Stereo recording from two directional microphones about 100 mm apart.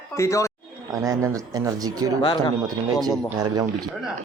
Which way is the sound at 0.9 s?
35° right (ahead or behind).